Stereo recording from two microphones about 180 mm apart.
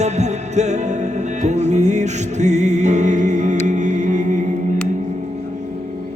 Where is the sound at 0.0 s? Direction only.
40° right (ahead or behind).